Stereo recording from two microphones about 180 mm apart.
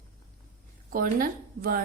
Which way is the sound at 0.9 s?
50° right (ahead or behind).